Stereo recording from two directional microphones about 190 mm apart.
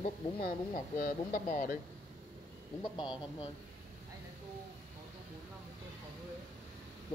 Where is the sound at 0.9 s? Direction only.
45° left (ahead or behind).